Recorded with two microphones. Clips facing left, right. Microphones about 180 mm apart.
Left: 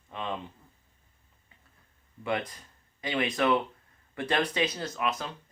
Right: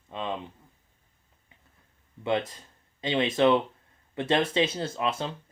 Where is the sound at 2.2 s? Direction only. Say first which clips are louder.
Right 4 dB; 25° right (ahead or behind).